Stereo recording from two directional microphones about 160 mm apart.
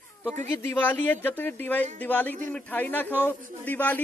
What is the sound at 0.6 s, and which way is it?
A man's voice, 10° left (ahead or behind).